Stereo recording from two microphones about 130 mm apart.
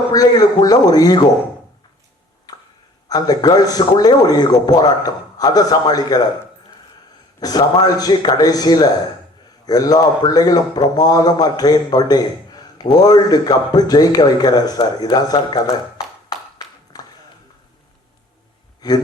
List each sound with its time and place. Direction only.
0.1 s a man's voice: 30° left (ahead or behind)
2.5 s a sound: 30° left (ahead or behind)
3.1 s a man's voice: 30° left (ahead or behind)
7.3 s a man's voice: 30° left (ahead or behind)
16.6 s a sound: 30° left (ahead or behind)
18.8 s speech: 30° left (ahead or behind)